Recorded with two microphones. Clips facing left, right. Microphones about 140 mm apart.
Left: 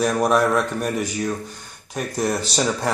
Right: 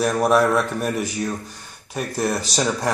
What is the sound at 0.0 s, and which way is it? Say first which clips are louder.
Speech: right 1 dB; 5° right (ahead or behind).